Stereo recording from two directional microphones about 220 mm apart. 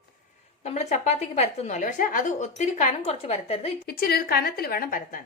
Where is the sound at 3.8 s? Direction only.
45° left (ahead or behind).